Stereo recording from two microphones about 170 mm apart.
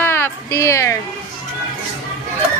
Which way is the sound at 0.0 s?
15° left (ahead or behind).